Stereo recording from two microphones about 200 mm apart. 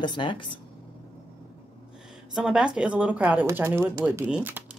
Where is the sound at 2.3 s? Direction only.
5° right (ahead or behind).